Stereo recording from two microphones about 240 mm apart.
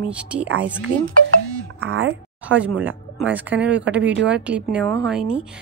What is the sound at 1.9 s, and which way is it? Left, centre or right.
Speech, right.